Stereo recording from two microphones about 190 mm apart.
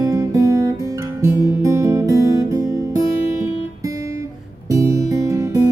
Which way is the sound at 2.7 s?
15° right (ahead or behind).